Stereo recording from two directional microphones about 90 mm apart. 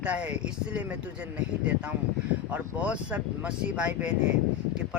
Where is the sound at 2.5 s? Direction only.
15° right (ahead or behind).